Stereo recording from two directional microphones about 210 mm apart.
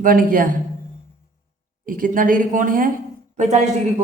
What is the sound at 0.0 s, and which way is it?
Speech, 40° right (ahead or behind).